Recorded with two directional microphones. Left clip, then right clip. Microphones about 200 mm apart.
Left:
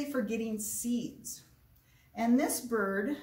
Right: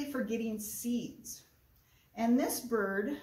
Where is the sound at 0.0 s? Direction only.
Centre (ahead or behind).